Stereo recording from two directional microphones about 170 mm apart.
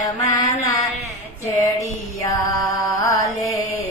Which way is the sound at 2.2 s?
20° left (ahead or behind).